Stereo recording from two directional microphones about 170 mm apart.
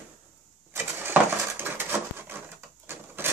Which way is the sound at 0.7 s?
10° right (ahead or behind).